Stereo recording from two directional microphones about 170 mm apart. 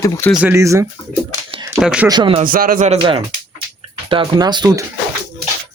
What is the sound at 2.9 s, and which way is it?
Speech, 30° right (ahead or behind).